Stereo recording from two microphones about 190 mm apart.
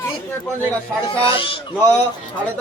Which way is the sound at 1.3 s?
30° left (ahead or behind).